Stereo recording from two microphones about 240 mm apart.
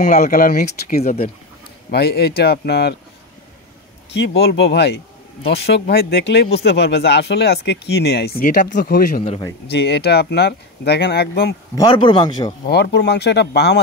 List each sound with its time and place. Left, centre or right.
0.0 s speech: left
1.0 s a man's voice: left
1.9 s speech: left
4.1 s speech: left
9.2 s a man's voice: left
9.7 s speech: left
11.7 s a man's voice: centre
12.6 s speech: left